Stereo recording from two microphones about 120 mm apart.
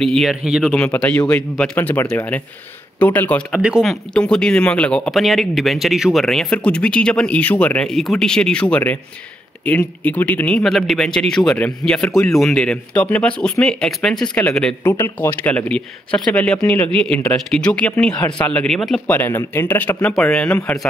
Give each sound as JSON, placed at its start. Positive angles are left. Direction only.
{"t": 0.0, "sound": "speech", "side_deg": 5}
{"t": 0.7, "sound": "speech", "side_deg": 10}
{"t": 3.5, "sound": "speech", "side_deg": -5}
{"t": 10.6, "sound": "speech", "side_deg": 0}
{"t": 14.8, "sound": "speech", "side_deg": 20}
{"t": 19.0, "sound": "speech", "side_deg": 15}